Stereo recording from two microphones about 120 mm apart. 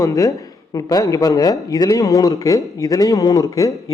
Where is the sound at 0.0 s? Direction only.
30° left (ahead or behind).